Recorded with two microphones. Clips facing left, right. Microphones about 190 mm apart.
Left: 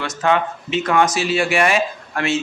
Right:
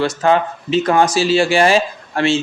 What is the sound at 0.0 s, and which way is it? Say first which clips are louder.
Speech: right 4 dB; 35° right (ahead or behind).